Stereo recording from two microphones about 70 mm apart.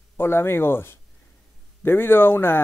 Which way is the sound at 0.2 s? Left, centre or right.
Left.